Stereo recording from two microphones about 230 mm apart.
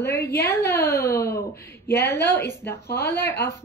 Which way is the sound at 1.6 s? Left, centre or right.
Left.